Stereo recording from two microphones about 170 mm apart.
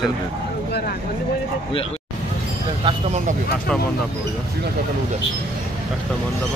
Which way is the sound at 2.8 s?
40° right (ahead or behind).